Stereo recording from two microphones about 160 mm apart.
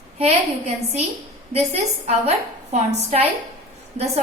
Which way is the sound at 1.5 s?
40° right (ahead or behind).